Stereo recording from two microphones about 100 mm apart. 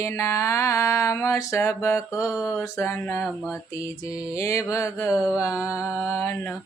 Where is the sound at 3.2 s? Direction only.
Centre (ahead or behind).